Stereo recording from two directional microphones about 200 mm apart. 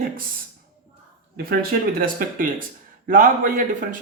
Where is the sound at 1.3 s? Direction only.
50° right (ahead or behind).